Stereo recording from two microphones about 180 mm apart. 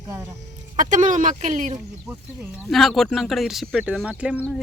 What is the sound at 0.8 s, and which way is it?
Speech, 45° right (ahead or behind).